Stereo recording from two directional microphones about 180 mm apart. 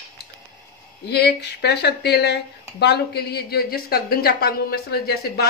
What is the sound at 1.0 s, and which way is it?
A woman's voice, 65° left (ahead or behind).